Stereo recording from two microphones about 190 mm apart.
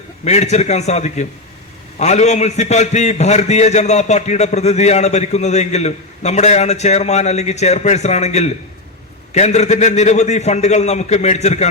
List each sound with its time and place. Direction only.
0.3 s a man's voice: 35° left (ahead or behind)